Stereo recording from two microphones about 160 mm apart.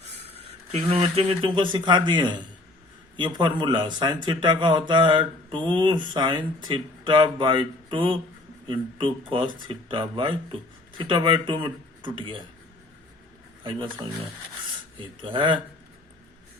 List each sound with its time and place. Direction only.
0.3 s speech: 40° right (ahead or behind)
13.7 s speech: 35° right (ahead or behind)
15.2 s speech: 30° right (ahead or behind)